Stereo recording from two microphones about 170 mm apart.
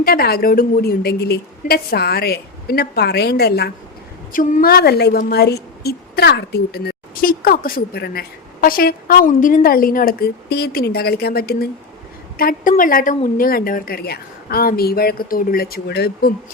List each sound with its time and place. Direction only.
0.0 s a woman's voice: 65° left (ahead or behind)
4.3 s a woman's voice: 50° left (ahead or behind)
4.7 s a woman's voice: 70° left (ahead or behind)
12.4 s a woman's voice: 55° left (ahead or behind); by 16.3 s 70° left (ahead or behind)